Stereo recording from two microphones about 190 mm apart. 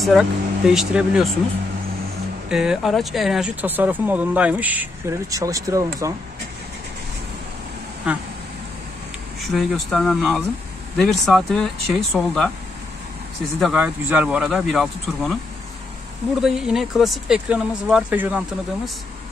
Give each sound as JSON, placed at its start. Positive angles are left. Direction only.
{"t": 0.0, "sound": "speech", "side_deg": 0}
{"t": 2.5, "sound": "speech", "side_deg": -5}
{"t": 8.1, "sound": "speech", "side_deg": -5}
{"t": 9.5, "sound": "speech", "side_deg": 0}
{"t": 13.6, "sound": "speech", "side_deg": -5}
{"t": 16.3, "sound": "speech", "side_deg": 0}